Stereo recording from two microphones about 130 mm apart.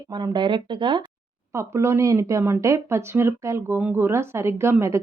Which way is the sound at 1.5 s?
20° right (ahead or behind).